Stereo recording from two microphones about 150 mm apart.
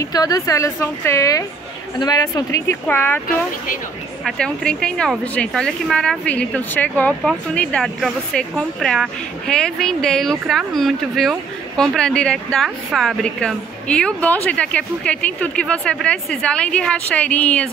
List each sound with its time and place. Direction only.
0.0 s a woman's voice: 25° left (ahead or behind); by 17.6 s 10° left (ahead or behind)